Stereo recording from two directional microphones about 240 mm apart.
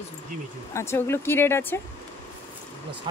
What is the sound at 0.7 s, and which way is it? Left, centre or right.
Speech, centre.